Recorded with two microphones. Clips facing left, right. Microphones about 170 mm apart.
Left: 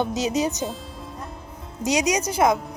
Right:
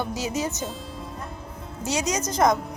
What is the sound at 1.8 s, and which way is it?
Speech, 15° left (ahead or behind).